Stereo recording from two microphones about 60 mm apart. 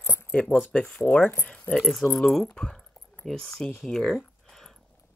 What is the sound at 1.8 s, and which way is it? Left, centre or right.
Speech, centre.